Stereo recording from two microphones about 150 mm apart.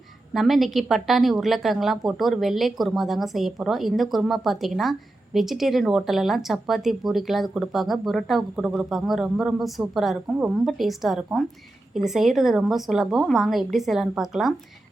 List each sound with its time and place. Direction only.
0.3 s a woman's voice: centre (ahead or behind)